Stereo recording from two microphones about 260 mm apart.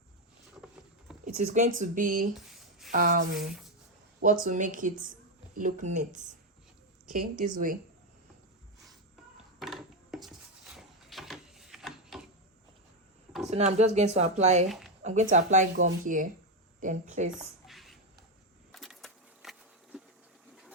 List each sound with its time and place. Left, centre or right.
0.5 s vehicle: centre
1.2 s a woman's voice: right
2.5 s a sound: centre
2.9 s a woman's voice: right
3.4 s speech: centre
4.2 s a woman's voice: right
7.1 s a woman's voice: right
9.6 s a sound: centre
13.5 s speech: right
14.7 s a sound: centre
15.0 s speech: right
17.3 s a sound: centre